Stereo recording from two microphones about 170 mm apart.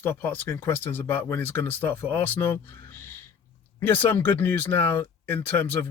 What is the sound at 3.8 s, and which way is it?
Speech, 15° left (ahead or behind).